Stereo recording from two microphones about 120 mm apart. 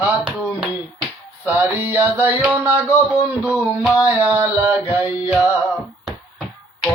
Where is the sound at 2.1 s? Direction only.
15° right (ahead or behind).